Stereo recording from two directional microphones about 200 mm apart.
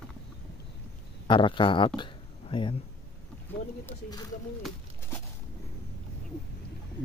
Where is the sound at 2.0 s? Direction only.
25° left (ahead or behind).